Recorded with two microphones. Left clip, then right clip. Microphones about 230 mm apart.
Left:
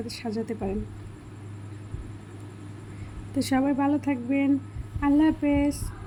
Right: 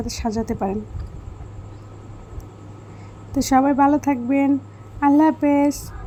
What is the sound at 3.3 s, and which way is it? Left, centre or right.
A woman's voice, centre.